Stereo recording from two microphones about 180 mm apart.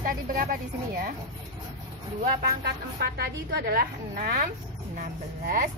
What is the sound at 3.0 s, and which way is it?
A woman's voice, 65° right (ahead or behind).